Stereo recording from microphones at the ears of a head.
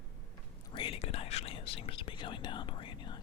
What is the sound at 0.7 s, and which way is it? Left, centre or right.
Whispering, left.